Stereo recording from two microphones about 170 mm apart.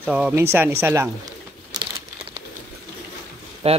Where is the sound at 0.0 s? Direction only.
10° right (ahead or behind).